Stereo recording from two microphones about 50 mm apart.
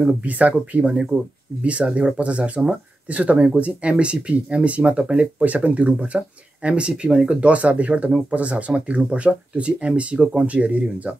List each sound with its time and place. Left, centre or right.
0.2 s speech: right